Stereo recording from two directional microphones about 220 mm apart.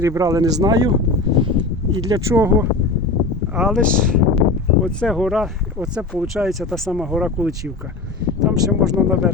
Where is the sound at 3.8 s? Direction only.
40° right (ahead or behind).